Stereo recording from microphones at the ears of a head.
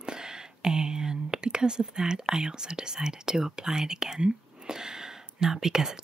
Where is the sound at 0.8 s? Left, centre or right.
Right.